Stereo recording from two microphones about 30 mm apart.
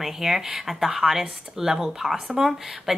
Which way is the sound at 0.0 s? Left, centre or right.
Centre.